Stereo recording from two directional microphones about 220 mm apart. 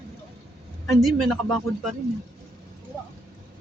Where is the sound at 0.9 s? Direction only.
Centre (ahead or behind).